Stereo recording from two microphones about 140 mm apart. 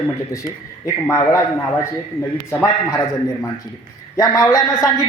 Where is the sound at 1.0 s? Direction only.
20° left (ahead or behind).